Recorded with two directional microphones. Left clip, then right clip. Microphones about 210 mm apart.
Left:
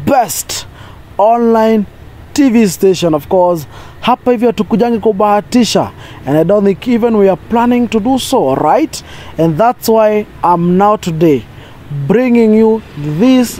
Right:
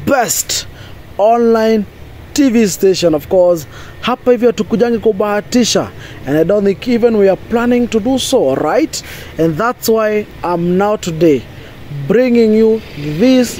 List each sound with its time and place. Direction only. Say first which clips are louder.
0.0 s speech: left 2 dB; 35° left (ahead or behind)